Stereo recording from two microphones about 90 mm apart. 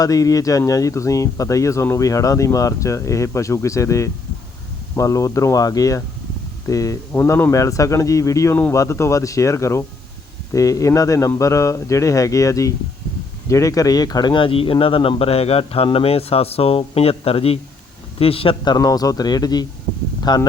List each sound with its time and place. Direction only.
0.0 s speech: 40° left (ahead or behind)
14.4 s a man's voice: 80° left
18.6 s speech: 45° left (ahead or behind)